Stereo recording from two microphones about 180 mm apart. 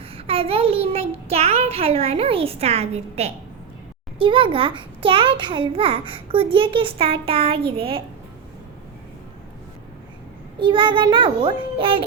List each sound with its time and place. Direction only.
0.3 s a child's voice: 30° right (ahead or behind)
10.6 s a child's voice: 25° right (ahead or behind)